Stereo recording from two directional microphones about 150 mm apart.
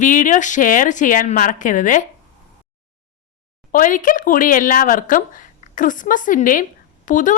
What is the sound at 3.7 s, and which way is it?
Speech, 60° left (ahead or behind).